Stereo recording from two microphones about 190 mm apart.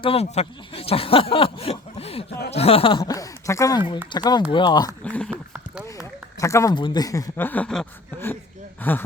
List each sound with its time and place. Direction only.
0.0 s speech: 30° left (ahead or behind)
5.0 s speech: 5° left (ahead or behind)
5.3 s a sound: 10° right (ahead or behind)
6.4 s speech: 15° left (ahead or behind)